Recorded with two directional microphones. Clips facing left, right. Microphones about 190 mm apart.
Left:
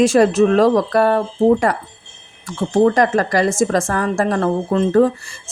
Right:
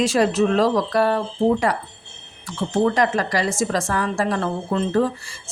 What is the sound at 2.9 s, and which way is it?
Speech, 50° left (ahead or behind).